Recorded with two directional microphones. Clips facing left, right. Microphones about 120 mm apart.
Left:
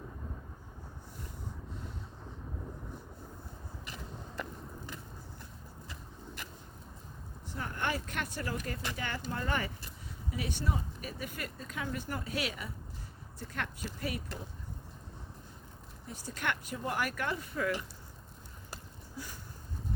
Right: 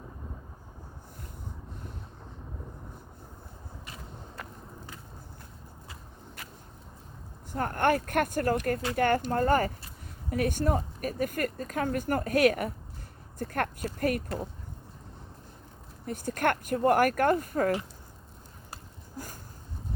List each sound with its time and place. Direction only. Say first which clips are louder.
7.4 s speech: right 10 dB; 50° right (ahead or behind)
16.0 s speech: right 9 dB; 55° right (ahead or behind)
19.1 s a sound: right 3 dB; 45° right (ahead or behind)